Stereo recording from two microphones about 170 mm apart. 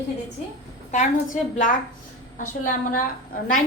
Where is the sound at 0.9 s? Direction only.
45° left (ahead or behind).